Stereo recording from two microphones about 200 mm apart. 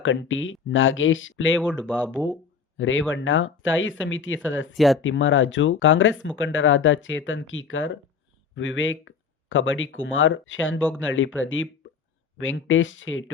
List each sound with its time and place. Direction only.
0.0 s speech: 75° left (ahead or behind)
1.8 s speech: 5° left (ahead or behind)
2.1 s speech: 10° right (ahead or behind)
2.7 s speech: 75° left (ahead or behind)